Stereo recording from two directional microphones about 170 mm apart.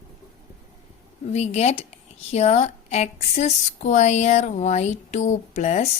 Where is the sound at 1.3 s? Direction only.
40° left (ahead or behind).